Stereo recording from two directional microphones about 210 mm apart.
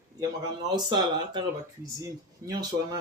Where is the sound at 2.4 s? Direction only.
20° right (ahead or behind).